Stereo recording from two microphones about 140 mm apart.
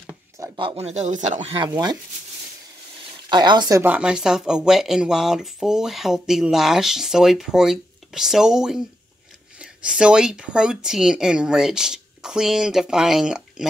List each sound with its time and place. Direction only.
0.6 s speech: 45° right (ahead or behind); by 1.5 s 60° right (ahead or behind)
1.5 s speech: 30° right (ahead or behind)
3.3 s speech: 30° right (ahead or behind)
3.8 s speech: 10° right (ahead or behind)